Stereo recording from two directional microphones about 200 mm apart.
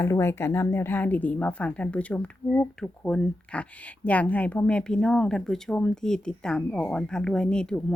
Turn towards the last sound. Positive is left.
turn(degrees=5)  # may be behind; listen again after turning